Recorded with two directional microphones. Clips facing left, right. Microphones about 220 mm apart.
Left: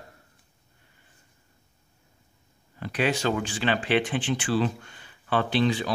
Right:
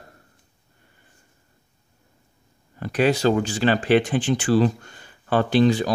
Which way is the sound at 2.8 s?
40° right (ahead or behind).